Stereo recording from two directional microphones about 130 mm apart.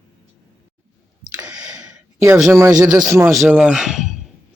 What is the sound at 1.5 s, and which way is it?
Clicking, 5° right (ahead or behind).